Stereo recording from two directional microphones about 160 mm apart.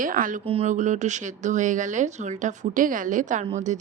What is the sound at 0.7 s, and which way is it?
Speech, 50° right (ahead or behind).